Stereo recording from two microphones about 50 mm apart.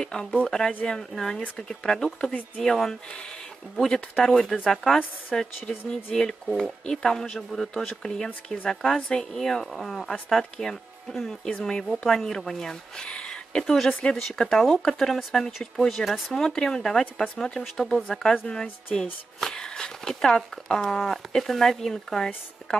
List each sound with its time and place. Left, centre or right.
0.0 s speech: centre
9.7 s speech: centre
19.4 s speech: centre